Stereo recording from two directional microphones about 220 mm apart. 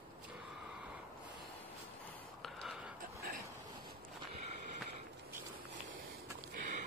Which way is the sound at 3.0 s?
40° right (ahead or behind).